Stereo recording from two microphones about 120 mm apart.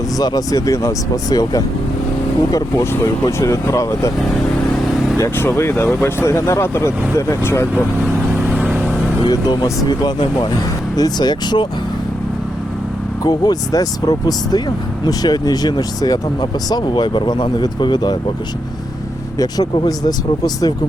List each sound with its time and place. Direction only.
0.2 s speech: 30° left (ahead or behind)
5.1 s speech: 25° left (ahead or behind)
8.5 s vehicle: 15° right (ahead or behind)
9.2 s speech: 35° left (ahead or behind)
13.2 s speech: 35° left (ahead or behind)
19.4 s speech: 35° left (ahead or behind)